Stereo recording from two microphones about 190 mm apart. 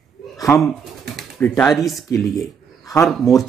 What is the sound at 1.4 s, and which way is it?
Speech, 5° left (ahead or behind).